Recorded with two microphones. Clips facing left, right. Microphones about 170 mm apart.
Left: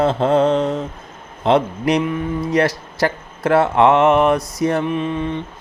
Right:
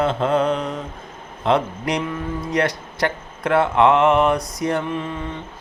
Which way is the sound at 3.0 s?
30° left (ahead or behind).